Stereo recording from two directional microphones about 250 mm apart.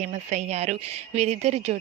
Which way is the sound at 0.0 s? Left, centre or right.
Right.